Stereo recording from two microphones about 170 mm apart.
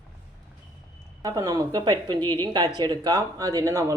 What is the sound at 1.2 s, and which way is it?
A woman's voice, 20° right (ahead or behind).